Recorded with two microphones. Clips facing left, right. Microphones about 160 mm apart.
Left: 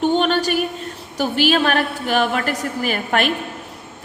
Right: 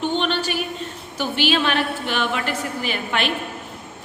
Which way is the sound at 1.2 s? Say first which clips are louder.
Left 4 dB; 40° left (ahead or behind).